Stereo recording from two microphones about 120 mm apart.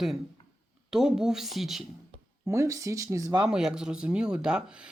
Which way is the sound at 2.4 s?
25° right (ahead or behind).